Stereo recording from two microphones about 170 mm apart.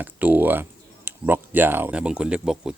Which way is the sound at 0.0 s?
10° right (ahead or behind).